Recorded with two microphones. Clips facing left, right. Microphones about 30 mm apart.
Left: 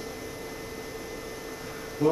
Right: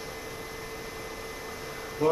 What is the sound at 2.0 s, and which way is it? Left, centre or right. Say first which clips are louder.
Speech: left 1 dB; centre.